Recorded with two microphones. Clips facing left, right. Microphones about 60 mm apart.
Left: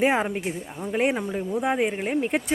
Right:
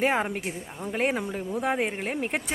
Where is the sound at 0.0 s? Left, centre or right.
Centre.